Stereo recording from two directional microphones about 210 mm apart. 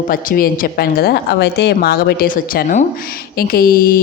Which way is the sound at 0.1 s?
40° left (ahead or behind).